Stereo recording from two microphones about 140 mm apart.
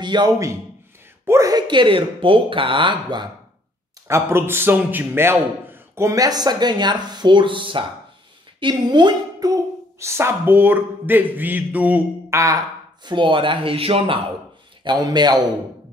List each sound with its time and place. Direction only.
0.0 s a man's voice: 30° right (ahead or behind)
4.1 s a man's voice: 15° right (ahead or behind); by 14.2 s 40° right (ahead or behind)
14.9 s a man's voice: 30° right (ahead or behind)